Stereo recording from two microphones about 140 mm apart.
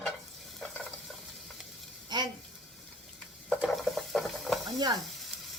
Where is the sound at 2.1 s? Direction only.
30° right (ahead or behind).